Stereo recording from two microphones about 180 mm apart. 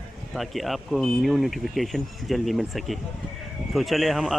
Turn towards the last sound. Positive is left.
turn(degrees=0)  # may be behind; listen again after turning